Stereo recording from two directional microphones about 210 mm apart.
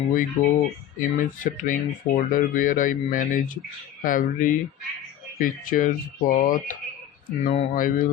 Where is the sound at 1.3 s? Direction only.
40° left (ahead or behind).